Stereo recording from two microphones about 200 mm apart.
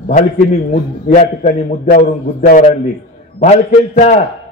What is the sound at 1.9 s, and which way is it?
A man's voice, 45° left (ahead or behind).